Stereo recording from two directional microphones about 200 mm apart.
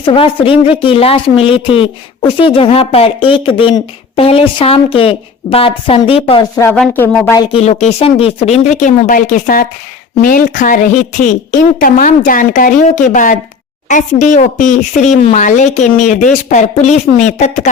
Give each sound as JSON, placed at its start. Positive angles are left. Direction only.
{"t": 0.0, "sound": "a woman's voice", "side_deg": 25}
{"t": 6.6, "sound": "speech", "side_deg": 10}
{"t": 7.5, "sound": "a woman's voice", "side_deg": 35}
{"t": 11.8, "sound": "a woman's voice", "side_deg": 40}